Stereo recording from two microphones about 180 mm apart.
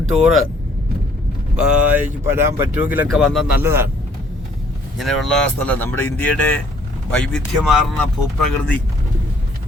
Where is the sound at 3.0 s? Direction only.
Centre (ahead or behind).